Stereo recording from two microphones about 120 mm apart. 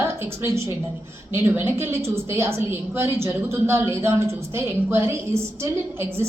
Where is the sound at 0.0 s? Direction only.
20° right (ahead or behind).